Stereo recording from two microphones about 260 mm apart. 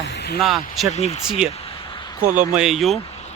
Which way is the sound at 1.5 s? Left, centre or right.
Left.